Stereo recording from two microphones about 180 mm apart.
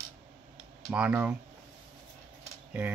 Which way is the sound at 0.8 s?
5° right (ahead or behind).